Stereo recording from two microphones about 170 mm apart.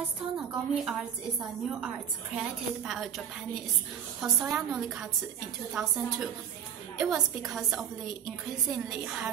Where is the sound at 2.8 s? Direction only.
Centre (ahead or behind).